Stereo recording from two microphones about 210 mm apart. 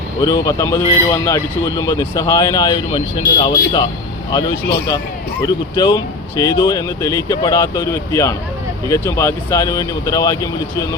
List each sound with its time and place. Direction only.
0.2 s speech: 15° left (ahead or behind)